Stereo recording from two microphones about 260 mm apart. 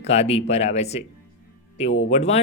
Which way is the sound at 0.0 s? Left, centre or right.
Left.